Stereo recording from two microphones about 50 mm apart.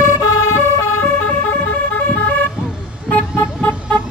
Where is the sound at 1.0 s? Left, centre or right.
Left.